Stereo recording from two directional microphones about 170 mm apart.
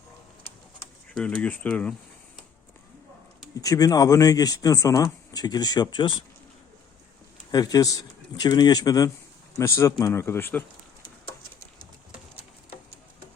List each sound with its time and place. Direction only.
1.1 s speech: 5° left (ahead or behind)
3.6 s speech: 20° left (ahead or behind)
7.5 s speech: 20° left (ahead or behind)